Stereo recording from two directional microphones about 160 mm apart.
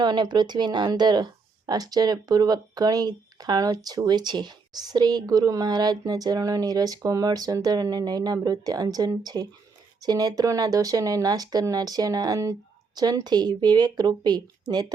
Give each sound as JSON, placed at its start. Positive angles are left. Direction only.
{"t": 0.0, "sound": "speech", "side_deg": -30}